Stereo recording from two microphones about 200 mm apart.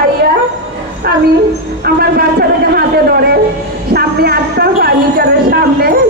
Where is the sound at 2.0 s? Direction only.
50° right (ahead or behind).